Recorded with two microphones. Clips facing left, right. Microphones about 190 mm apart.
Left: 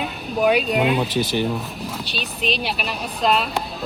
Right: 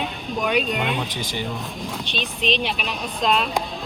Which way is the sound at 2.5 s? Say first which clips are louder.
Even; 5° left (ahead or behind).